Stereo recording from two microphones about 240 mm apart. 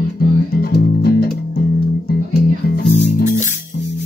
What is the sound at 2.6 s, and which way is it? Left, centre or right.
Music, left.